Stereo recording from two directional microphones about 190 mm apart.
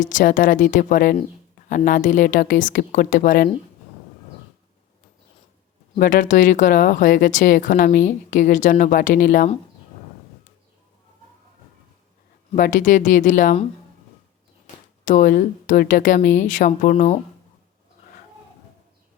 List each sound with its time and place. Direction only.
0.0 s speech: 45° left (ahead or behind)
6.0 s speech: 45° left (ahead or behind)
12.5 s speech: 45° left (ahead or behind)
15.0 s speech: 40° left (ahead or behind)